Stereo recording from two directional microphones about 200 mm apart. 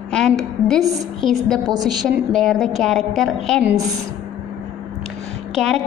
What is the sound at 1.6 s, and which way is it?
Speech, 20° right (ahead or behind).